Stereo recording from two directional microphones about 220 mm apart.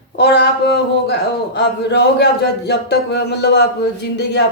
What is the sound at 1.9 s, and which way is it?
Speech, 50° left (ahead or behind).